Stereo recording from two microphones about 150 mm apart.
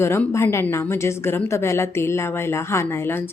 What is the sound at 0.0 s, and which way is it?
A woman's voice, 15° left (ahead or behind).